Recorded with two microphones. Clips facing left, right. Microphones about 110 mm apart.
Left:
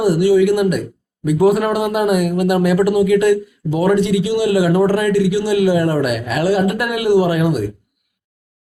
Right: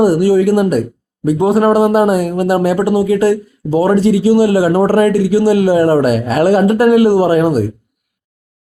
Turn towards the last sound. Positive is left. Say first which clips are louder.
# right 5 dB
turn(degrees=-40)  # may be behind; listen again after turning